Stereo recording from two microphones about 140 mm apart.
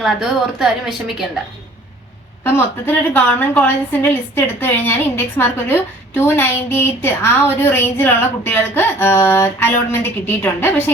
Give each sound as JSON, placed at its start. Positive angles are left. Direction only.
{"t": 0.0, "sound": "a woman's voice", "side_deg": -5}
{"t": 2.4, "sound": "a woman's voice", "side_deg": 15}